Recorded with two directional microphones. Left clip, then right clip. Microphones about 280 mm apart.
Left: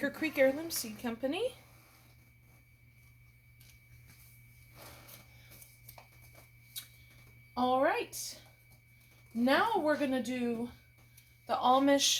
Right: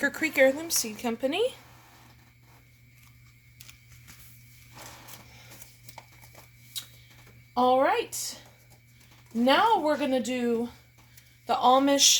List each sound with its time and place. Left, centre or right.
0.0 s a woman's voice: right
7.5 s a woman's voice: right
9.4 s a woman's voice: right